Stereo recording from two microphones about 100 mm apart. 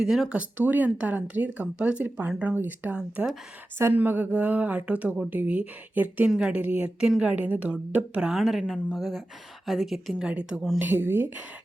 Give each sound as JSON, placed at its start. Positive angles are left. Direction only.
{"t": 0.0, "sound": "a woman's voice", "side_deg": -5}
{"t": 0.3, "sound": "a woman's voice", "side_deg": -20}
{"t": 10.8, "sound": "speech", "side_deg": -20}